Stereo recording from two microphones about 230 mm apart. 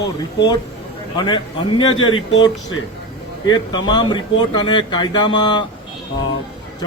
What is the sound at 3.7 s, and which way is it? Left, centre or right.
A man's voice, centre.